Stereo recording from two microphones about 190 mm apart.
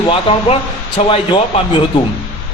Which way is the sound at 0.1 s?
30° left (ahead or behind).